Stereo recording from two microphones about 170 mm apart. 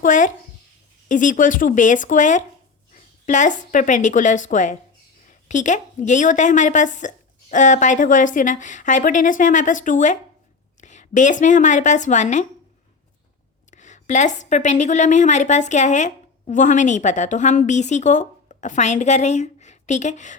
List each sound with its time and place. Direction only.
0.0 s a woman's voice: 50° left (ahead or behind)
13.7 s a woman's voice: 45° left (ahead or behind)